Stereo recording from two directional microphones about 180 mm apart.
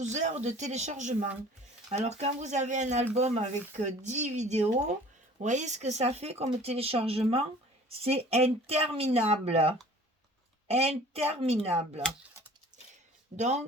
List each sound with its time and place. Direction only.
0.0 s speech: 40° right (ahead or behind)
12.7 s a sound: 40° right (ahead or behind)
13.3 s speech: 40° right (ahead or behind)